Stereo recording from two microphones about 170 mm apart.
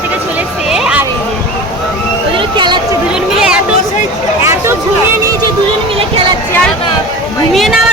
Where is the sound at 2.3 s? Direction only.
30° right (ahead or behind).